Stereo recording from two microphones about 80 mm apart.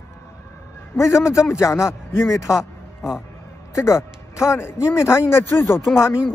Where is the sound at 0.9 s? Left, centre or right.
Left.